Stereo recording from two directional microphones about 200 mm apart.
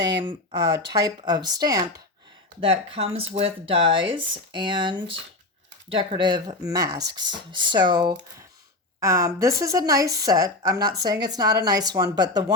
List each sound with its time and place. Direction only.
0.2 s a woman's voice: 20° right (ahead or behind)